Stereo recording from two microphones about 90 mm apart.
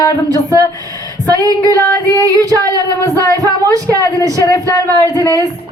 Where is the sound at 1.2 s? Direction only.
45° right (ahead or behind).